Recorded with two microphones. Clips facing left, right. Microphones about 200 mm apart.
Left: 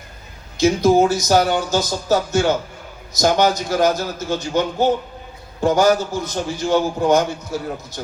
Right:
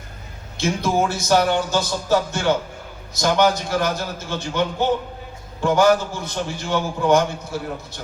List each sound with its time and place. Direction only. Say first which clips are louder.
0.5 s a man's voice: left 7 dB; 40° left (ahead or behind)